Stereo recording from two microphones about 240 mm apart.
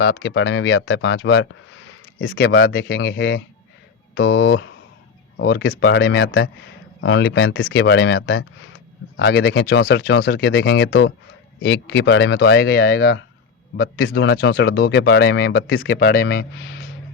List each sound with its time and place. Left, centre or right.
0.0 s speech: left